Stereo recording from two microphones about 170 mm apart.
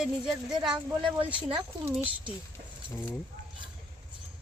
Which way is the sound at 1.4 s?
30° right (ahead or behind).